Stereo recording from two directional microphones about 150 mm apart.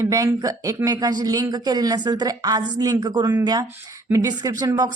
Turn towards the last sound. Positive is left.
turn(degrees=-25)  # may be behind; listen again after turning